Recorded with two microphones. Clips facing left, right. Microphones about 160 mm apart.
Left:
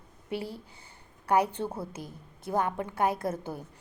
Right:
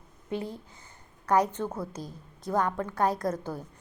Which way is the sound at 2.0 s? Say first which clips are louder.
Right 2 dB; 55° left (ahead or behind).